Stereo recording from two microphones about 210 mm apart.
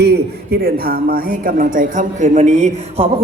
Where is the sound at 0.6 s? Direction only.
45° right (ahead or behind).